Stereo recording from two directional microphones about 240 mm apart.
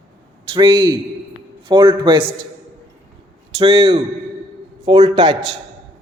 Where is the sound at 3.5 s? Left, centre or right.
Right.